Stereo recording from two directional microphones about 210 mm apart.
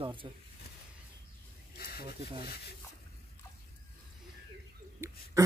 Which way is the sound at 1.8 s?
45° left (ahead or behind).